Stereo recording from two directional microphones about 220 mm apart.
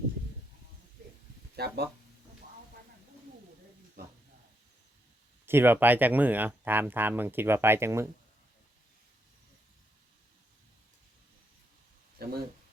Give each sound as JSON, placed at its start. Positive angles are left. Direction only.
{"t": 1.5, "sound": "speech", "side_deg": -45}
{"t": 5.5, "sound": "speech", "side_deg": -10}
{"t": 12.2, "sound": "a sound", "side_deg": -45}